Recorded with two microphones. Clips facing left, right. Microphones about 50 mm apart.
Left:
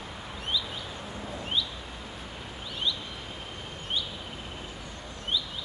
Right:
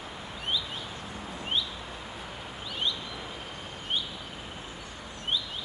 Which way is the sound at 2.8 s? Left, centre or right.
Right.